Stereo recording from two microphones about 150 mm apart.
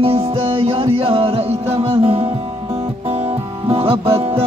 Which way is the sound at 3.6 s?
40° right (ahead or behind).